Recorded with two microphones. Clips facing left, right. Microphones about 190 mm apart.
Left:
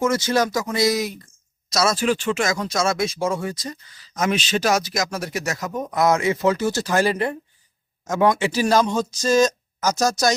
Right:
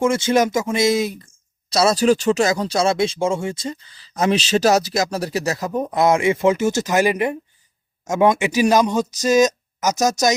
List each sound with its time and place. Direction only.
0.0 s speech: 25° right (ahead or behind)